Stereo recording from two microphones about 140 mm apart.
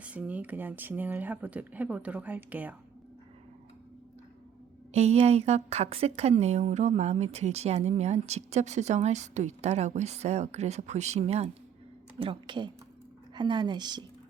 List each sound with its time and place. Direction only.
0.0 s speech: 10° right (ahead or behind)
4.9 s speech: 50° right (ahead or behind)
12.2 s a woman's voice: 35° right (ahead or behind)